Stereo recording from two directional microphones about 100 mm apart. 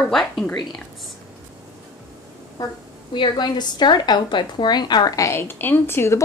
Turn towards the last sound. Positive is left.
turn(degrees=25)  # may be behind; listen again after turning